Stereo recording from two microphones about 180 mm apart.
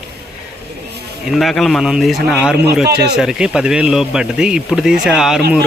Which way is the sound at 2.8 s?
65° right (ahead or behind).